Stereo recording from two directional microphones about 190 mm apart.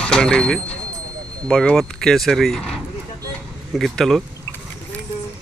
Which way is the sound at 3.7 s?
Centre (ahead or behind).